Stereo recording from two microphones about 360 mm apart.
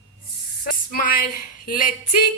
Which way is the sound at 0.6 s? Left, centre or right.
Left.